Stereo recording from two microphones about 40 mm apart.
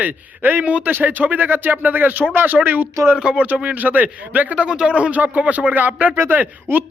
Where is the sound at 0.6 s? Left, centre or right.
Right.